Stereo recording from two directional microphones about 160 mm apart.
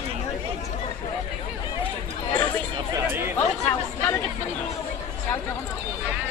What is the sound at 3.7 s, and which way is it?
Chatter, 15° left (ahead or behind).